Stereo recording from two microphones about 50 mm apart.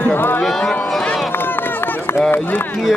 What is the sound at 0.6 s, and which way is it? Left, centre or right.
Speech, centre.